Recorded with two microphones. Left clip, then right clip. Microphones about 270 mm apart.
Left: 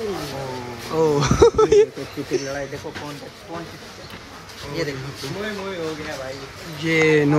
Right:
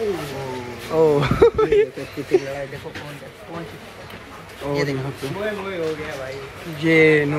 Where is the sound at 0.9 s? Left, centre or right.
Centre.